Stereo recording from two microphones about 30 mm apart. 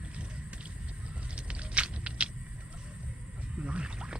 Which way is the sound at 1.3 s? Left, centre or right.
Right.